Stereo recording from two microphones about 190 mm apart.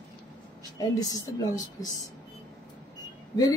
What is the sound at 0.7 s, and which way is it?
Speech, 20° left (ahead or behind).